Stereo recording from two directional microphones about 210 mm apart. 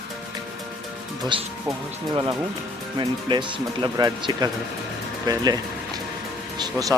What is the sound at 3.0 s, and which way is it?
Speech, 20° right (ahead or behind).